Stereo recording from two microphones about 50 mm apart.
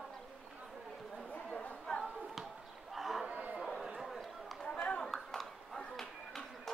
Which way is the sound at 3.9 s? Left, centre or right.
Centre.